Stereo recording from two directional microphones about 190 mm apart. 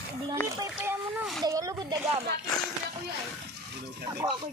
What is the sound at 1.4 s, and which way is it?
Speech, 20° right (ahead or behind).